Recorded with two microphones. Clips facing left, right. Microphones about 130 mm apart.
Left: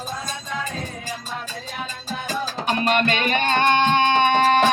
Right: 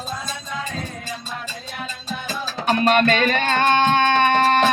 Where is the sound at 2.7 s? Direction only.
40° right (ahead or behind).